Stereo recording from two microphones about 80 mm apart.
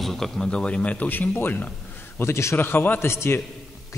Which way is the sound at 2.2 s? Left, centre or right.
Left.